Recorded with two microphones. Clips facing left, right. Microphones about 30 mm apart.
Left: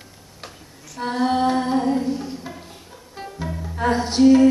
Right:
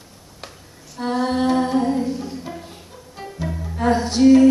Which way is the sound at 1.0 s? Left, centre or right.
Centre.